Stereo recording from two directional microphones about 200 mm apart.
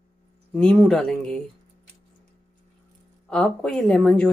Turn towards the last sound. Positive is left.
turn(degrees=5)  # may be behind; listen again after turning